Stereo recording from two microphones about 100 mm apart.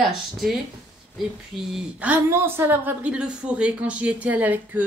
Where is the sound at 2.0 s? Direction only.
15° right (ahead or behind).